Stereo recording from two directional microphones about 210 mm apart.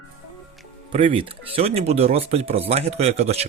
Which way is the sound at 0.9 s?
25° right (ahead or behind).